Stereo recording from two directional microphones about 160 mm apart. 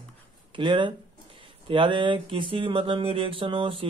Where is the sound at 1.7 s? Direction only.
30° right (ahead or behind).